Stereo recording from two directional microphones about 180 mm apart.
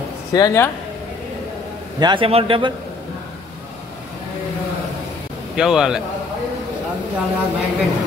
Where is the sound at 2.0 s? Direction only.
25° right (ahead or behind).